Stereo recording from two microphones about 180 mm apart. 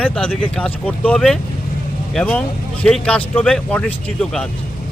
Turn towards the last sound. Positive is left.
turn(degrees=5)  # may be behind; listen again after turning